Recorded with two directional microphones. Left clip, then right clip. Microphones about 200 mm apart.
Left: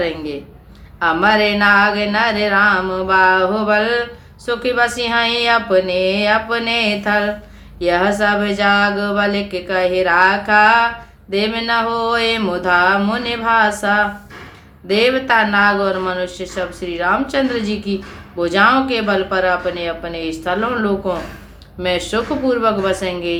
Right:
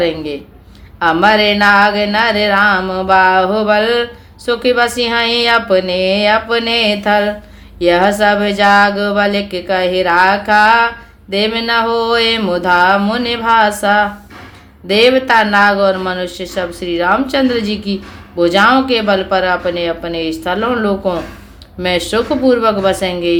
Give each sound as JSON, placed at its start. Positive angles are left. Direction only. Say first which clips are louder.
{"t": 0.9, "sound": "speech", "louder": "right 3 dB", "side_deg": -35}